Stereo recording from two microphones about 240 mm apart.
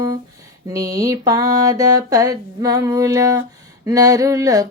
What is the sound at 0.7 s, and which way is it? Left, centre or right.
Humming, centre.